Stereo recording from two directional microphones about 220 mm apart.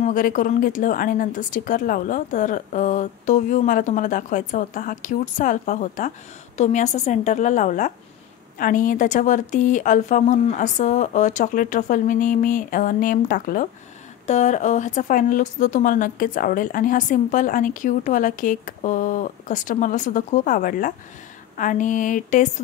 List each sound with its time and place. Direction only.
0.0 s speech: 35° left (ahead or behind)